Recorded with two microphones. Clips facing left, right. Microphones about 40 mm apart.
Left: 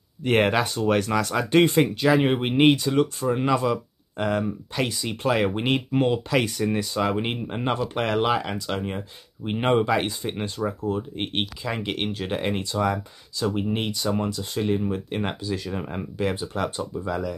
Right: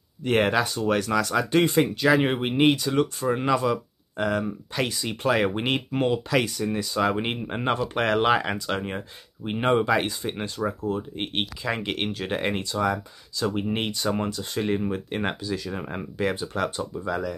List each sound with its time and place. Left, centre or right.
0.2 s speech: centre
1.4 s speech: left
1.7 s speech: centre
2.5 s speech: centre
2.8 s speech: centre
6.4 s speech: left
7.0 s speech: centre
9.5 s speech: centre
13.7 s speech: centre